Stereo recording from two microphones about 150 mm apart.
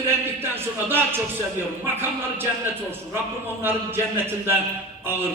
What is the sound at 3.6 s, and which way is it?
A man's voice, 15° right (ahead or behind).